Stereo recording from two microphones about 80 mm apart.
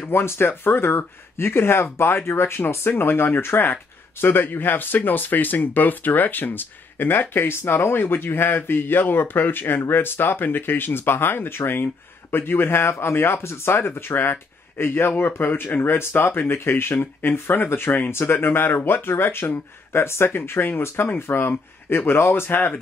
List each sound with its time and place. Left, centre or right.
0.0 s speech: left